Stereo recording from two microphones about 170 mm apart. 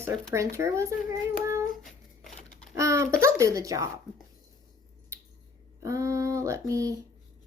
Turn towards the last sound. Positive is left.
turn(degrees=-20)  # may be behind; listen again after turning